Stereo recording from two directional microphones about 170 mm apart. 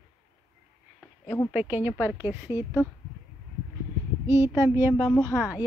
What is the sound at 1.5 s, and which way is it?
A woman's voice, 10° right (ahead or behind).